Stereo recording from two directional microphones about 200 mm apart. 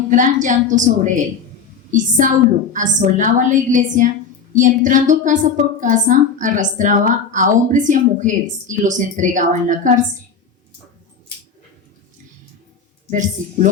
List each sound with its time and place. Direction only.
0.1 s a woman's voice: 40° right (ahead or behind)
13.1 s a woman's voice: 40° right (ahead or behind)